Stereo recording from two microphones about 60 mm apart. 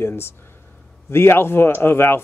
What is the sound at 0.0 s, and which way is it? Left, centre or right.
A man's voice, left.